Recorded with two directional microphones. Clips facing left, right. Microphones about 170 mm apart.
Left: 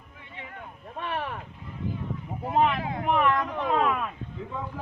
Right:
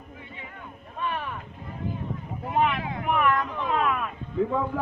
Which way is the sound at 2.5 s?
35° left (ahead or behind).